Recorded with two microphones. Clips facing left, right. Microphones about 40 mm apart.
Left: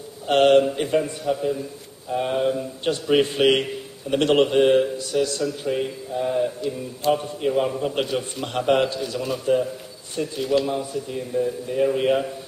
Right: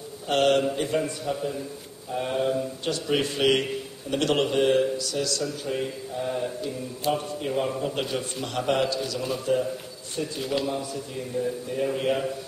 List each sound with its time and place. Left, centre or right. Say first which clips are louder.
0.3 s a man's voice: left 6 dB; left
1.2 s speech: left 5 dB; centre
2.8 s a man's voice: left 11 dB; left
5.7 s a man's voice: left 4 dB; centre
9.2 s speech: left 5 dB; centre
11.3 s speech: left 5 dB; centre